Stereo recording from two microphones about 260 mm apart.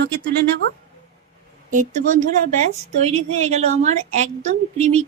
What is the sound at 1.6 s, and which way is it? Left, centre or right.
A woman's voice, right.